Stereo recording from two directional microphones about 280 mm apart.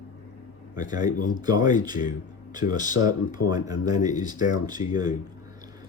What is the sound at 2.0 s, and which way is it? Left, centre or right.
Speech, left.